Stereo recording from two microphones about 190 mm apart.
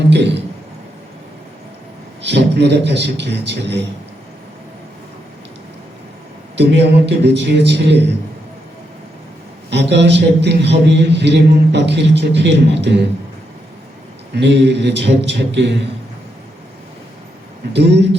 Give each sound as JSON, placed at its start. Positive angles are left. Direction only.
{"t": 0.1, "sound": "a man's voice", "side_deg": -65}
{"t": 2.2, "sound": "a man's voice", "side_deg": -65}
{"t": 6.6, "sound": "a man's voice", "side_deg": -65}
{"t": 9.6, "sound": "a man's voice", "side_deg": -65}
{"t": 14.3, "sound": "a man's voice", "side_deg": -65}
{"t": 17.7, "sound": "a man's voice", "side_deg": -65}